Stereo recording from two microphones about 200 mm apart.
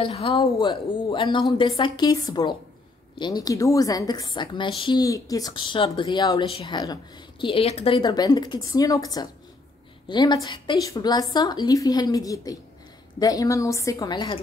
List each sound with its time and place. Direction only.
0.0 s a woman's voice: 30° left (ahead or behind)